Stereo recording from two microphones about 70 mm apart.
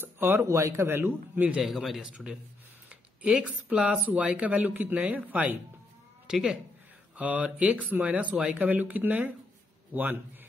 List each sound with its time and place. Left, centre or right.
0.0 s speech: right
0.6 s a man's voice: right
0.8 s a man's voice: right
1.6 s speech: centre
2.9 s speech: centre
6.2 s speech: centre
7.2 s speech: centre